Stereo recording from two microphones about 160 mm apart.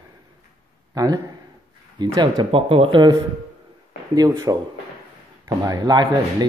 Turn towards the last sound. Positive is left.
turn(degrees=-25)  # may be behind; listen again after turning